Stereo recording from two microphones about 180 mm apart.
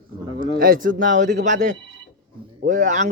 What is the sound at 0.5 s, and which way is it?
Speech, 55° right (ahead or behind).